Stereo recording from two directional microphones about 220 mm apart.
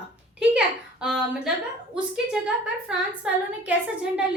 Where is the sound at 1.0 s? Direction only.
5° right (ahead or behind).